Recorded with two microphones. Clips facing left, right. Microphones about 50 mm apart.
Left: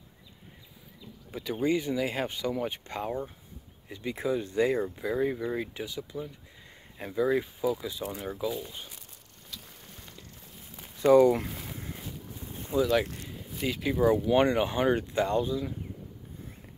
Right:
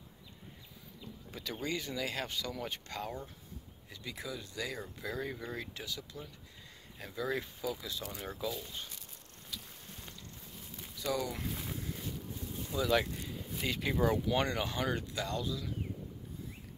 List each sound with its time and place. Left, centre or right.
1.3 s speech: centre; by 4.9 s left
5.0 s speech: centre
11.0 s speech: left
11.7 s boat: left
12.7 s speech: left
13.6 s speech: centre
14.2 s speech: left